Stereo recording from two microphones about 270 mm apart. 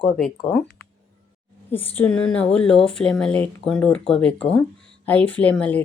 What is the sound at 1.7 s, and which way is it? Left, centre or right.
Speech, centre.